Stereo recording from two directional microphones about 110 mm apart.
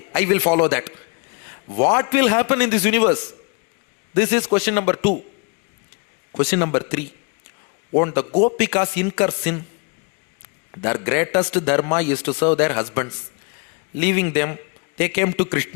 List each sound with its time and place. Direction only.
0.0 s a man's voice: 20° left (ahead or behind)
6.3 s a man's voice: 20° left (ahead or behind)
10.7 s a man's voice: 25° left (ahead or behind)